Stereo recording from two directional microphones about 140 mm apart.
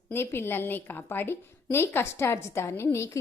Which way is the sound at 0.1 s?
15° left (ahead or behind).